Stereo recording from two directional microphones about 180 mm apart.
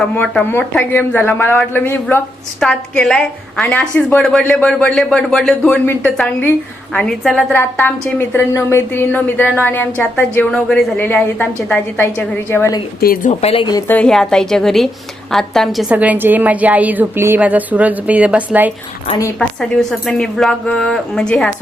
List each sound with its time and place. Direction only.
0.1 s a woman's voice: 5° left (ahead or behind)
13.0 s speech: 55° left (ahead or behind)
13.4 s speech: 30° left (ahead or behind)
13.8 s a woman's voice: 5° left (ahead or behind); by 18.7 s 10° right (ahead or behind)
19.4 s speech: centre (ahead or behind)